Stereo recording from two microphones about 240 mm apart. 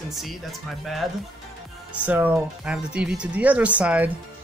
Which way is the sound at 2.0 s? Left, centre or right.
Centre.